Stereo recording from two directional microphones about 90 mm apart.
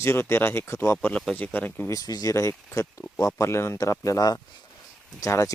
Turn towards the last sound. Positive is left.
turn(degrees=35)  # may be behind; listen again after turning